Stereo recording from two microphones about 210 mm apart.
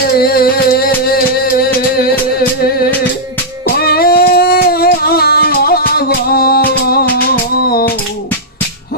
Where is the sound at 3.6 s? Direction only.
45° left (ahead or behind).